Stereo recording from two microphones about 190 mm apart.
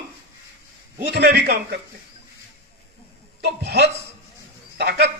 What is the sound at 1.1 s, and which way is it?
Speech, 55° right (ahead or behind).